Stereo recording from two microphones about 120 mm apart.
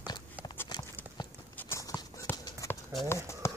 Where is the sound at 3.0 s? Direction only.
25° left (ahead or behind).